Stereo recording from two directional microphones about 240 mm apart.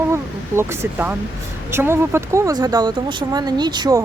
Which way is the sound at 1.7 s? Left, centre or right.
Centre.